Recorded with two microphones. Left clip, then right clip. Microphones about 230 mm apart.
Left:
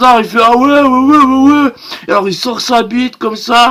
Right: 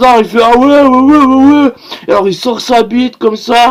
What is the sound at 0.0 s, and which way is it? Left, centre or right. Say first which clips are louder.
Speech: right 1 dB; centre.